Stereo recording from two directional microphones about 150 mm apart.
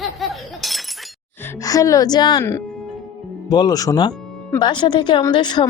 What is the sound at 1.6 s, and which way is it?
Speech, 25° left (ahead or behind).